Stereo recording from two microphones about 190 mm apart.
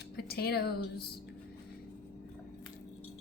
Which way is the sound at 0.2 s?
55° left (ahead or behind).